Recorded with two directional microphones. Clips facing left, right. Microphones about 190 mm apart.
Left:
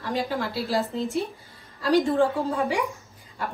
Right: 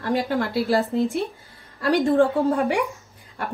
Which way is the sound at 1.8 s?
55° right (ahead or behind).